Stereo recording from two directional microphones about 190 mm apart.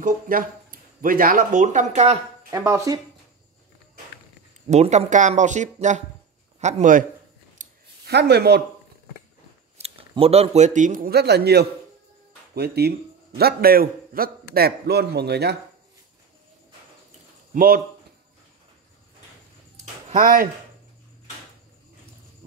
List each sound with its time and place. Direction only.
0.0 s speech: 45° right (ahead or behind)
2.5 s speech: 15° right (ahead or behind)
4.6 s a man's voice: 35° right (ahead or behind)
7.6 s scissors: 40° right (ahead or behind)
8.1 s a man's voice: 60° right (ahead or behind)
9.8 s a man's voice: 30° right (ahead or behind); by 15.5 s 60° right (ahead or behind)
17.6 s a man's voice: 50° right (ahead or behind)
19.8 s a sound: 40° right (ahead or behind)